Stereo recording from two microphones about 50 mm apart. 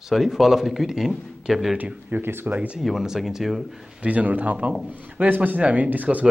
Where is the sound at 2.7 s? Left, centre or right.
Centre.